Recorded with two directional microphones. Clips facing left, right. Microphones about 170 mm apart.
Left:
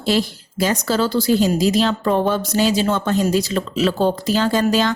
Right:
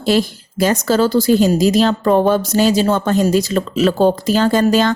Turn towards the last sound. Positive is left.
turn(degrees=-50)  # may be behind; listen again after turning